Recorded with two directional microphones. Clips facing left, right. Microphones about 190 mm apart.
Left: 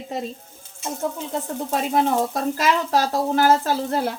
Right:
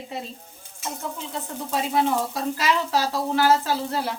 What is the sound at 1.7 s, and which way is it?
Speech, 50° left (ahead or behind).